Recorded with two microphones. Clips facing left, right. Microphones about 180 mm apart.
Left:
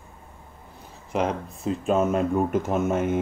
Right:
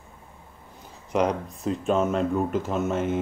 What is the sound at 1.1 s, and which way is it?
A man's voice, centre (ahead or behind).